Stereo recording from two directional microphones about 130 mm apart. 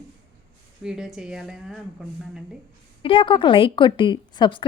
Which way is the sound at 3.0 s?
40° left (ahead or behind).